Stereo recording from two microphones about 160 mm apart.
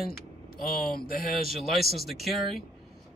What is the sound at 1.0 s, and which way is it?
Speech, 65° left (ahead or behind).